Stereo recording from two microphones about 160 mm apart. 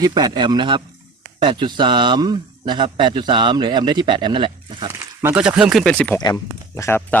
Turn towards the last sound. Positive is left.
turn(degrees=15)  # may be behind; listen again after turning